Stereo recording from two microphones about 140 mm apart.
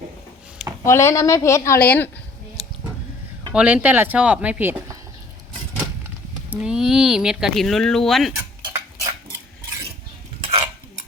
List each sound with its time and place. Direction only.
0.9 s a woman's voice: 20° left (ahead or behind)
3.5 s speech: 10° right (ahead or behind)
6.5 s speech: 10° right (ahead or behind)
8.4 s tick-tock: 20° right (ahead or behind)